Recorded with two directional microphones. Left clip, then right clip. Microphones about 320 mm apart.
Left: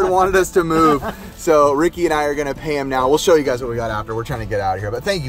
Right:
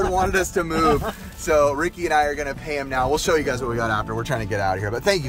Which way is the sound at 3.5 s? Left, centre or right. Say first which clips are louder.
Left 2 dB; centre.